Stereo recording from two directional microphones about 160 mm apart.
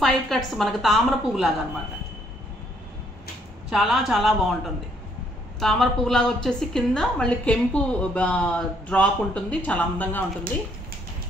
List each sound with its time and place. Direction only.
0.0 s a woman's voice: centre (ahead or behind)
3.7 s a woman's voice: centre (ahead or behind)
5.6 s a woman's voice: centre (ahead or behind)